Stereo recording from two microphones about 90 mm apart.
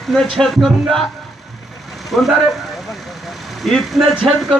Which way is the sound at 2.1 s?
Centre (ahead or behind).